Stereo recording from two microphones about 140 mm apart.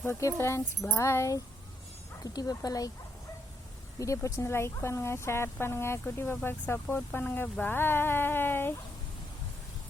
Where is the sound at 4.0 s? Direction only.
20° left (ahead or behind).